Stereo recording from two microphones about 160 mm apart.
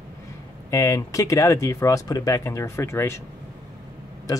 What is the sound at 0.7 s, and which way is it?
Speech, 20° left (ahead or behind).